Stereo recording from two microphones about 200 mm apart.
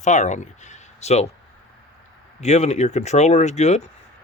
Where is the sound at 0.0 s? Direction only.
35° left (ahead or behind).